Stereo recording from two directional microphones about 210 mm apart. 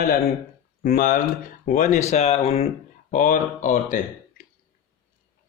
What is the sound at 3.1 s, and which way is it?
Speech, 40° left (ahead or behind).